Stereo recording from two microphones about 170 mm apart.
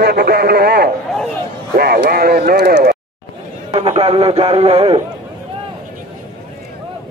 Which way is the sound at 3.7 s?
35° right (ahead or behind).